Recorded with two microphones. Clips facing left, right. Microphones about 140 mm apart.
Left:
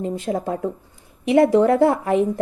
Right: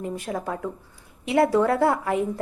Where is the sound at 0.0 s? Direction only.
25° left (ahead or behind).